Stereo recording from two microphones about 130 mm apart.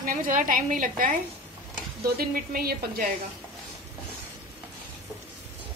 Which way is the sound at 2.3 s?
90° right.